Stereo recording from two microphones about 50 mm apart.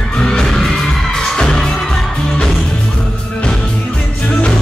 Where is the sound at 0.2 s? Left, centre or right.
Centre.